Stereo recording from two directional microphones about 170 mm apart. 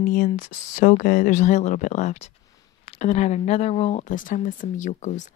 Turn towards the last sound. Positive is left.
turn(degrees=45)  # may be behind; listen again after turning